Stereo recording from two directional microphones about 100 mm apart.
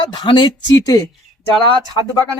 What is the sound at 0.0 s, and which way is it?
Speech, 55° left (ahead or behind).